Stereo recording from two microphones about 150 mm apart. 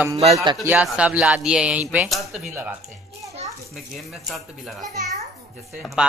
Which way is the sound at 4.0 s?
Centre (ahead or behind).